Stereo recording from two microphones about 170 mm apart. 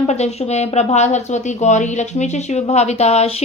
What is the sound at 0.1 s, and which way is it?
Speech, 40° left (ahead or behind).